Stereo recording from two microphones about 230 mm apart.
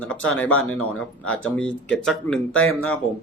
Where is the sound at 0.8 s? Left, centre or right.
Left.